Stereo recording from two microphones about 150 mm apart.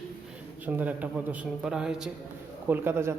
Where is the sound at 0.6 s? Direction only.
10° right (ahead or behind).